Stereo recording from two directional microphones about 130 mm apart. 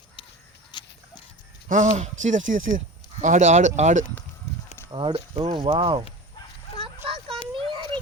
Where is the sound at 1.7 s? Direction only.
70° right (ahead or behind); by 2.8 s 90° right.